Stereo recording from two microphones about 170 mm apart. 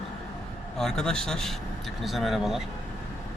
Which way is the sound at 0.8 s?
5° left (ahead or behind).